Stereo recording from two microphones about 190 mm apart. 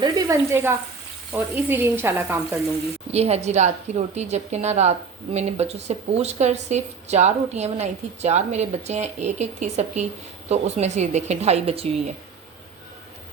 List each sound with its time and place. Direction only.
0.0 s speech: 20° right (ahead or behind)
3.1 s a woman's voice: 35° right (ahead or behind)